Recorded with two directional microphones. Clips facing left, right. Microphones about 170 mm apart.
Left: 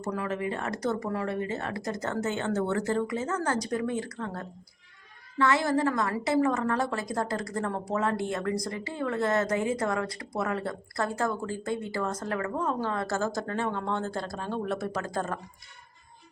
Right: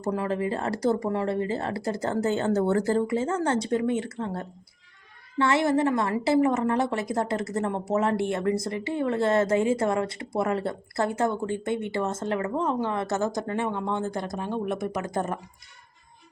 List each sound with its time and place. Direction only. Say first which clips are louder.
0.0 s a woman's voice: right 4 dB; 30° right (ahead or behind)